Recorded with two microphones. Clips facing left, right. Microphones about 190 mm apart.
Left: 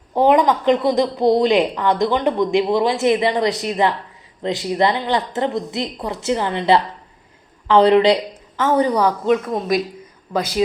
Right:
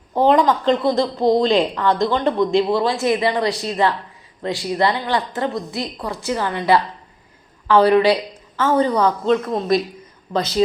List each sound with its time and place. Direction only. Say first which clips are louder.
0.1 s a woman's voice: left 1 dB; 15° left (ahead or behind)